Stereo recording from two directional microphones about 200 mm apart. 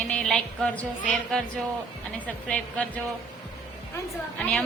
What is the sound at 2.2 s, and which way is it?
Speech, 5° left (ahead or behind).